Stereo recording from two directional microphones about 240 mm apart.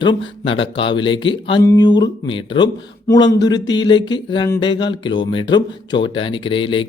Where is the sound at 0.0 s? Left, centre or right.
Centre.